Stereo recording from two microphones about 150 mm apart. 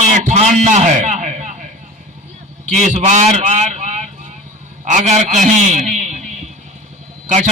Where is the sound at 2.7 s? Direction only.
55° right (ahead or behind).